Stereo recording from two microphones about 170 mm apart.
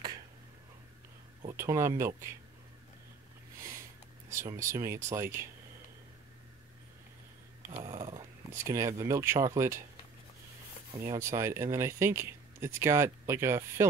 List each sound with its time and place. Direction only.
1.6 s speech: 15° right (ahead or behind)
4.3 s speech: 15° right (ahead or behind)
7.8 s dog: 20° right (ahead or behind)
8.6 s speech: 15° right (ahead or behind)
11.1 s speech: 15° right (ahead or behind)